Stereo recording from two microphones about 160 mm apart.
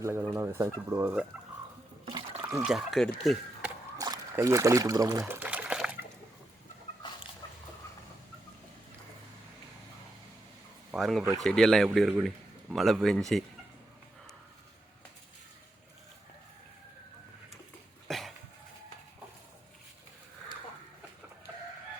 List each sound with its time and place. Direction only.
0.0 s speech: 15° right (ahead or behind)
2.6 s speech: centre (ahead or behind)
3.9 s speech: 20° right (ahead or behind)
5.3 s trickle: 10° right (ahead or behind)
10.9 s speech: centre (ahead or behind)
18.1 s dog: centre (ahead or behind)